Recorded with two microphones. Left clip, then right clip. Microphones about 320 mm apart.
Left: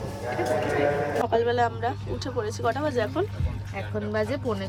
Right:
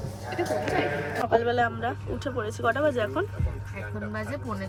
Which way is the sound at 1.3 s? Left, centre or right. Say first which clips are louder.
Right 2 dB; centre.